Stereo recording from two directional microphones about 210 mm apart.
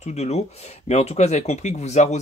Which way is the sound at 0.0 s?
30° left (ahead or behind).